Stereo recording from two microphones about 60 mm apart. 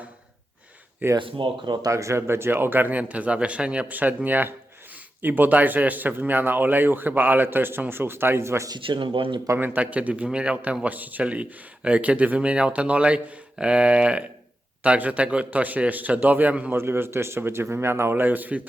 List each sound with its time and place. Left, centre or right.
1.0 s speech: right
1.8 s speech: right
9.6 s speech: right
16.7 s speech: right